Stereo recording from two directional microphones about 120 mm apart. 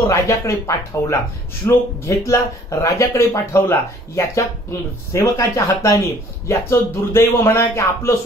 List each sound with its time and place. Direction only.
0.0 s speech: 25° left (ahead or behind)